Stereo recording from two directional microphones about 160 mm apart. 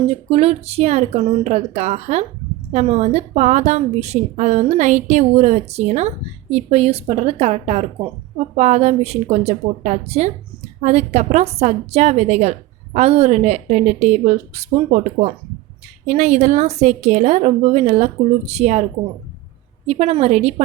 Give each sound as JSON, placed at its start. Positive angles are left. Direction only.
{"t": 0.1, "sound": "a woman's voice", "side_deg": -35}
{"t": 19.9, "sound": "a woman's voice", "side_deg": -40}